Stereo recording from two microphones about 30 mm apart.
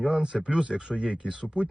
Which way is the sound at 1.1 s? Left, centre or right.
Right.